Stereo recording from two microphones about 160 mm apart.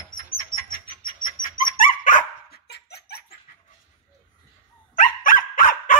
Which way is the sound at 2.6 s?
90° left.